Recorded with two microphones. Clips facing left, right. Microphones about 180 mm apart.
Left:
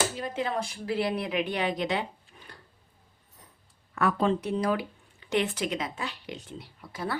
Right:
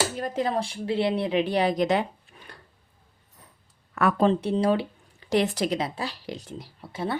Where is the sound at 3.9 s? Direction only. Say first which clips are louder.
Right 3 dB; 65° right (ahead or behind).